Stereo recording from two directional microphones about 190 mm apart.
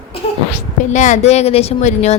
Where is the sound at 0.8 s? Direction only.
40° left (ahead or behind).